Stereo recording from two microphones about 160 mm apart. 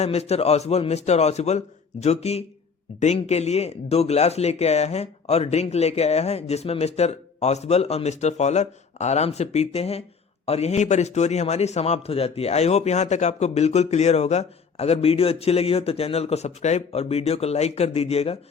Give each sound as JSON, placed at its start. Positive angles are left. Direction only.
{"t": 0.0, "sound": "a man's voice", "side_deg": 40}